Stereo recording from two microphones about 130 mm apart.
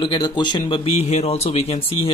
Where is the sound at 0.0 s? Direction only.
35° left (ahead or behind).